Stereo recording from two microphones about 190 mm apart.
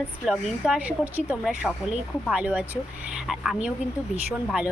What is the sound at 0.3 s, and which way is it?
A woman's voice, 5° right (ahead or behind).